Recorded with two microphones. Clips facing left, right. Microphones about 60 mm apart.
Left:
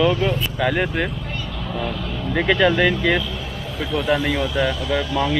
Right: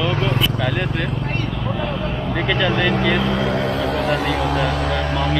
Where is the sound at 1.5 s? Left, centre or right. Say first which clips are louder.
Right 3 dB; centre.